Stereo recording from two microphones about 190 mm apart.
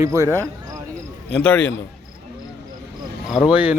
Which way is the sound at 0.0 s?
15° right (ahead or behind).